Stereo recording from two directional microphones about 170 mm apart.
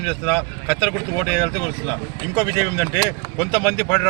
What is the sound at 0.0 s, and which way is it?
Speech, 5° left (ahead or behind).